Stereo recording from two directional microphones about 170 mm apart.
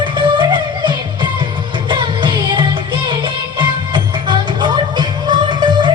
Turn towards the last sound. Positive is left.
turn(degrees=-25)  # may be behind; listen again after turning